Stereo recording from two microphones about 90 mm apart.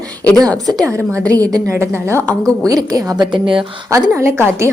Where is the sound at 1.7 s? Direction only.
30° right (ahead or behind).